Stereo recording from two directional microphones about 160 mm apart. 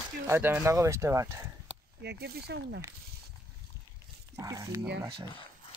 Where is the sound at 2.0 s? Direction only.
80° right.